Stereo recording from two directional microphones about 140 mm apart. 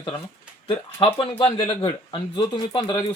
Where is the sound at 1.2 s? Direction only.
40° left (ahead or behind).